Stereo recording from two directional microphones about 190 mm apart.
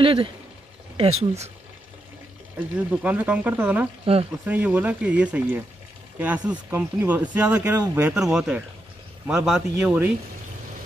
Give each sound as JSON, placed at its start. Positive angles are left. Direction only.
{"t": 0.0, "sound": "speech", "side_deg": -30}
{"t": 2.7, "sound": "speech", "side_deg": -10}
{"t": 4.0, "sound": "speech", "side_deg": -30}
{"t": 4.5, "sound": "speech", "side_deg": -10}